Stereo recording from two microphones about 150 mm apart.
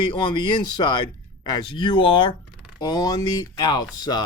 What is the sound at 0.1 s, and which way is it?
Speech, 30° left (ahead or behind).